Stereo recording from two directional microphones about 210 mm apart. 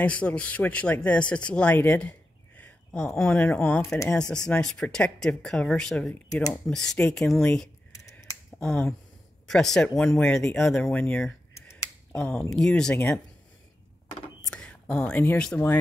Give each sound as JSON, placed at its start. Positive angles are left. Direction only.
{"t": 0.0, "sound": "speech", "side_deg": 5}
{"t": 7.9, "sound": "a sound", "side_deg": 15}
{"t": 8.5, "sound": "speech", "side_deg": 5}
{"t": 14.4, "sound": "speech", "side_deg": 5}